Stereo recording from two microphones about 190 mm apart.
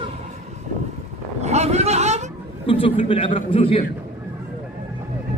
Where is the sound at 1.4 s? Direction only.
35° right (ahead or behind).